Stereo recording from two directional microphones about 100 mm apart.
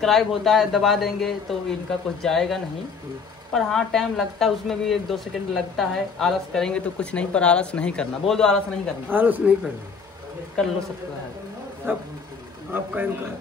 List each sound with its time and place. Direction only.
0.0 s speech: centre (ahead or behind)
9.1 s a woman's voice: 15° right (ahead or behind)
11.8 s a woman's voice: 25° right (ahead or behind)